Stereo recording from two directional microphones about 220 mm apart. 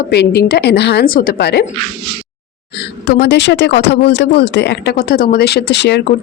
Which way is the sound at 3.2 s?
50° left (ahead or behind).